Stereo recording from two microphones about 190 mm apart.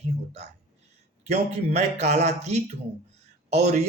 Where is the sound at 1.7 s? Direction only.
35° right (ahead or behind).